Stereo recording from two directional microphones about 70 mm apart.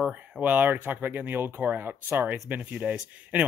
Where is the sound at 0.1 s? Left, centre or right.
Right.